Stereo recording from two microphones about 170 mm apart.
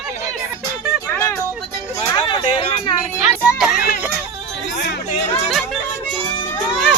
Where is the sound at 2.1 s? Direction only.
30° left (ahead or behind).